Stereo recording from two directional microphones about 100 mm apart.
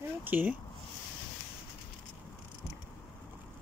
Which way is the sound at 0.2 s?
20° right (ahead or behind).